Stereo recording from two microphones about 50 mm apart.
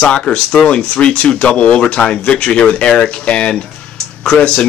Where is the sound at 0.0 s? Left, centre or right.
Left.